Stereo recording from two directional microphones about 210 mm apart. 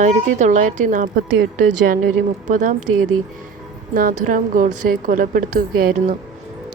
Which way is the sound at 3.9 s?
40° right (ahead or behind).